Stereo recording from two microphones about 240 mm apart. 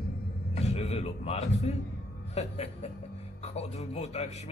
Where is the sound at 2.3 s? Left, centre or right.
Left.